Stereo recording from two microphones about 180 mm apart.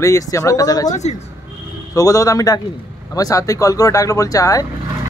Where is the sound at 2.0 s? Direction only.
20° left (ahead or behind).